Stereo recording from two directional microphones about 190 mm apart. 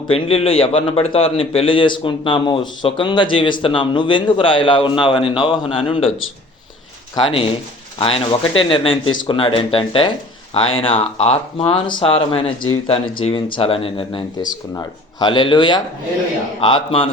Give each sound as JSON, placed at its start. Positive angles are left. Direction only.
{"t": 0.1, "sound": "speech", "side_deg": 30}
{"t": 7.2, "sound": "speech", "side_deg": 25}